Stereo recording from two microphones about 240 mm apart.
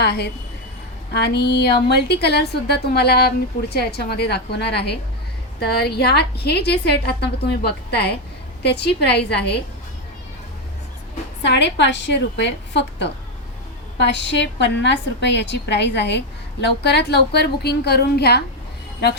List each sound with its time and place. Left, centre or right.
0.0 s a woman's voice: left
11.4 s a woman's voice: left